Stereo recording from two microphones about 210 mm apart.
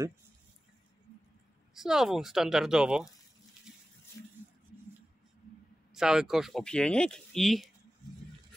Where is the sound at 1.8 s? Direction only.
Centre (ahead or behind).